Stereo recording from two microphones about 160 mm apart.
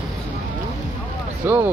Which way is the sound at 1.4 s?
15° right (ahead or behind).